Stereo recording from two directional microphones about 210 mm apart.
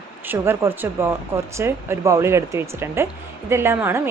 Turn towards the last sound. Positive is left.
turn(degrees=-10)  # may be behind; listen again after turning